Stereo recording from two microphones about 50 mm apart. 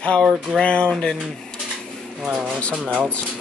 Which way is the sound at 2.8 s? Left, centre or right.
Centre.